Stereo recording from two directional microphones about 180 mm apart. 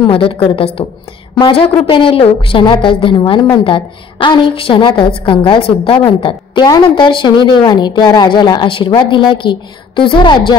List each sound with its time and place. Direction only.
0.0 s a woman's voice: 30° left (ahead or behind)